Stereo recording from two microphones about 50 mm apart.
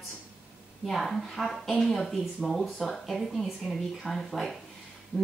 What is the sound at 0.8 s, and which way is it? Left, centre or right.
A woman's voice, centre.